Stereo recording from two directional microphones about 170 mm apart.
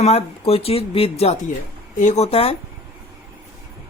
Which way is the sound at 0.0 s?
35° left (ahead or behind).